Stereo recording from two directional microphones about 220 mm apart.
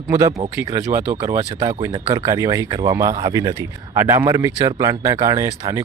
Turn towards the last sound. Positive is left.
turn(degrees=-15)  # may be behind; listen again after turning